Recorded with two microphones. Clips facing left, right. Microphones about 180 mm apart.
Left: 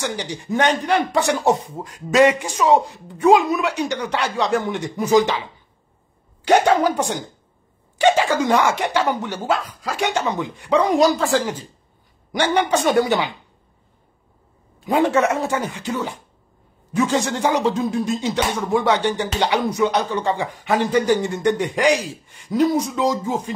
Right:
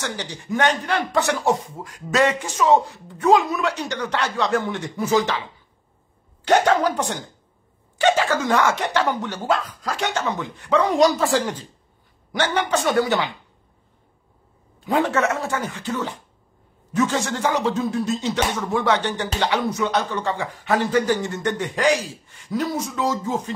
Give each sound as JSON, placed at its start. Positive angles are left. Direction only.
{"t": 0.0, "sound": "a man's voice", "side_deg": 15}
{"t": 6.4, "sound": "a man's voice", "side_deg": 10}
{"t": 11.0, "sound": "speech", "side_deg": 0}
{"t": 12.3, "sound": "a man's voice", "side_deg": 15}
{"t": 14.9, "sound": "a man's voice", "side_deg": 15}